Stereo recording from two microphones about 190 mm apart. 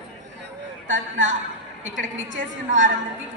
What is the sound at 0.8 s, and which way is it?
Speech, 80° right.